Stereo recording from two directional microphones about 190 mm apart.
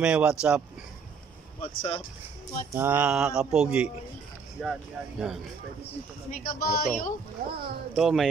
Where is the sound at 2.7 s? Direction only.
10° right (ahead or behind).